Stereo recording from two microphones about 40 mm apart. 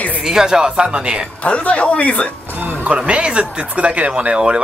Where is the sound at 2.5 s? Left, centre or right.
Right.